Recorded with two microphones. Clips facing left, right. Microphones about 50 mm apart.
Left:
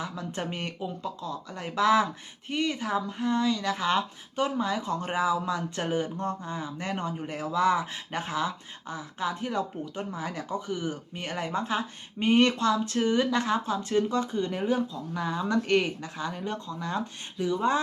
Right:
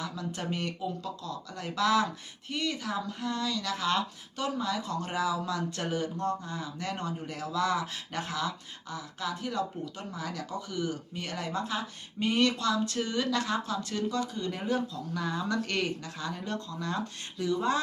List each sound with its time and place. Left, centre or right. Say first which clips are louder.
0.0 s speech: left 2 dB; left
14.6 s speech: left 3 dB; centre